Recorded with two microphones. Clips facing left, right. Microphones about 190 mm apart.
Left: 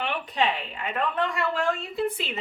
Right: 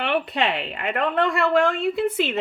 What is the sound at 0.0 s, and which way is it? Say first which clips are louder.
A woman's voice: right 4 dB; 70° right (ahead or behind).